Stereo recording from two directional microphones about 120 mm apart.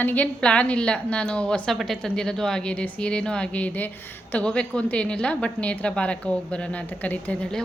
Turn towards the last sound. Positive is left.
turn(degrees=10)  # may be behind; listen again after turning